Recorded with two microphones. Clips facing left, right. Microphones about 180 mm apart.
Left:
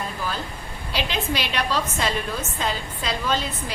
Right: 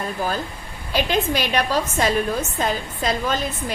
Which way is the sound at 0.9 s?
50° right (ahead or behind).